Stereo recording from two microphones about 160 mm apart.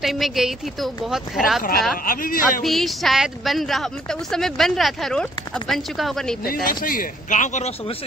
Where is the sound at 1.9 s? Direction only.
60° left (ahead or behind).